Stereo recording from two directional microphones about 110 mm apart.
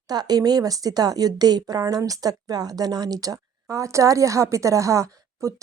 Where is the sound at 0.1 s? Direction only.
35° right (ahead or behind).